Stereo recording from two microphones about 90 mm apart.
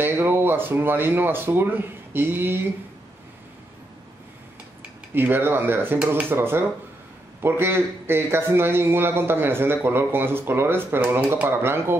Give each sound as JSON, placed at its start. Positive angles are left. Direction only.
{"t": 0.0, "sound": "a man's voice", "side_deg": -25}
{"t": 5.1, "sound": "a man's voice", "side_deg": -25}